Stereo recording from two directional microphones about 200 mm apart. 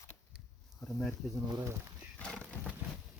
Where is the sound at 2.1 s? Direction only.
5° left (ahead or behind).